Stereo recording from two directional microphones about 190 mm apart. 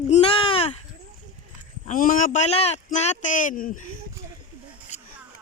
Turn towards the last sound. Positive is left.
turn(degrees=45)  # may be behind; listen again after turning